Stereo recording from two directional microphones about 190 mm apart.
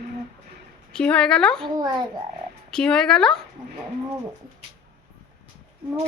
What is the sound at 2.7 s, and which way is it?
Speech, 5° left (ahead or behind).